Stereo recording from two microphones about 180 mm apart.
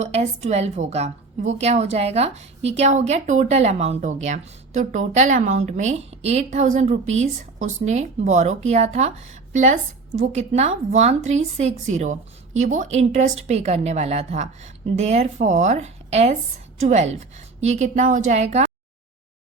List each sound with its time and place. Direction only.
0.0 s a woman's voice: 40° right (ahead or behind)